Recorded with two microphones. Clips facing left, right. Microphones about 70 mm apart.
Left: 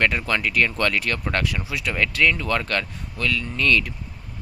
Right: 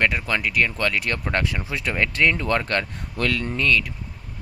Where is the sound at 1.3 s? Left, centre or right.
Right.